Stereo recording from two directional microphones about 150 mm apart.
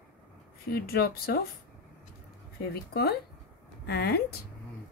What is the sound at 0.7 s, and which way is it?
Speech, 90° left.